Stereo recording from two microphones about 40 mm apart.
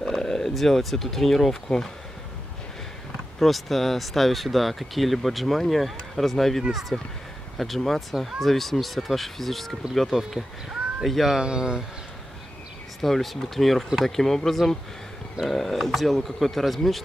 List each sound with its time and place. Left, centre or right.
0.0 s speech: centre
3.3 s speech: centre
11.4 s speech: centre
13.0 s speech: centre